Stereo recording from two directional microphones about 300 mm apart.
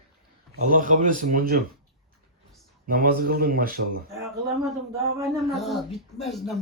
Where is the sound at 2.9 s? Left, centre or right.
Right.